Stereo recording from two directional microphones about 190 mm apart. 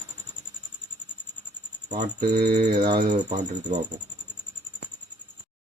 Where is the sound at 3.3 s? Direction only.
40° right (ahead or behind).